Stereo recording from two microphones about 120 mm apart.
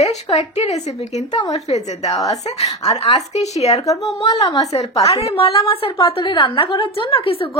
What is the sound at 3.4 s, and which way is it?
Speech, 65° left (ahead or behind).